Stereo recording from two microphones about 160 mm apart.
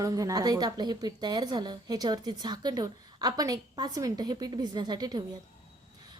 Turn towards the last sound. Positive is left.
turn(degrees=-25)  # may be behind; listen again after turning